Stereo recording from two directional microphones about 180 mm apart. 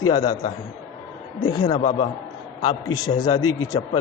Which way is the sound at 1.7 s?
35° left (ahead or behind).